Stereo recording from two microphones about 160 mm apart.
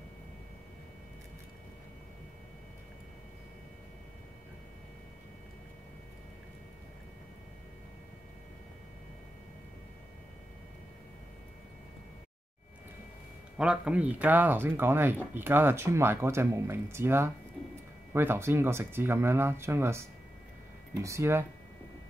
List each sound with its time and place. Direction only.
13.6 s speech: 5° right (ahead or behind)